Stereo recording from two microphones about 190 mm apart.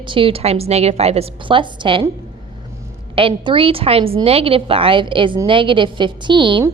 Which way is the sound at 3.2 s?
30° right (ahead or behind).